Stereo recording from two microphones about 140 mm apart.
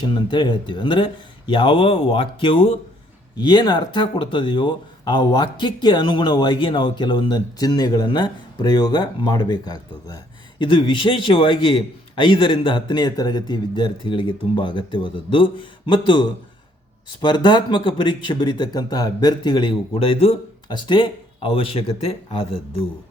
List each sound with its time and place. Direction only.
0.0 s speech: 35° left (ahead or behind)